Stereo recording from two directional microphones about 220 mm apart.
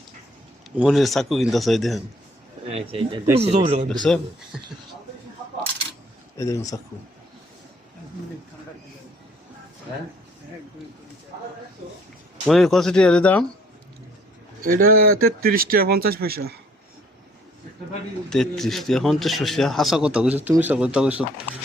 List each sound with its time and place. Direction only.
0.8 s speech: centre (ahead or behind)
2.6 s speech: 25° right (ahead or behind)
4.0 s speech: 5° left (ahead or behind)
6.3 s speech: 15° left (ahead or behind)
12.5 s speech: centre (ahead or behind)
14.6 s speech: 40° right (ahead or behind)
18.3 s speech: centre (ahead or behind)